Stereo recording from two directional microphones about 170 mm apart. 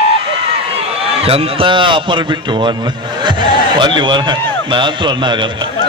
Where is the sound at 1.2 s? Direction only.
35° right (ahead or behind).